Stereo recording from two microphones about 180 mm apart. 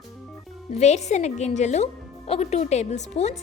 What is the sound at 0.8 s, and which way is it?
Speech, 40° left (ahead or behind).